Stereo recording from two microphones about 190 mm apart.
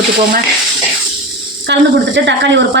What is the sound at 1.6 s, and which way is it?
Speech, 65° right (ahead or behind).